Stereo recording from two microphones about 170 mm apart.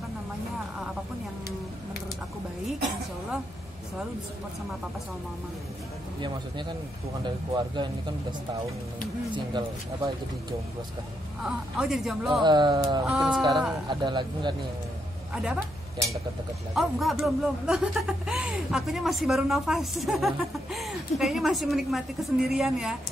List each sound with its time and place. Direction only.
7.2 s speech: 25° right (ahead or behind)
11.4 s speech: centre (ahead or behind)
12.4 s speech: 25° right (ahead or behind)
13.0 s speech: 5° right (ahead or behind)
13.8 s speech: 25° right (ahead or behind)
15.3 s speech: 5° right (ahead or behind)
16.7 s speech: centre (ahead or behind)